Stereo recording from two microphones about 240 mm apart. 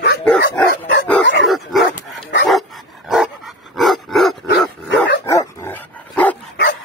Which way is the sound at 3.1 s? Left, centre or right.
Centre.